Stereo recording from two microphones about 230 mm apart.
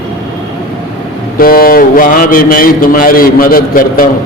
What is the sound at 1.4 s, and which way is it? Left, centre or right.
A man's voice, left.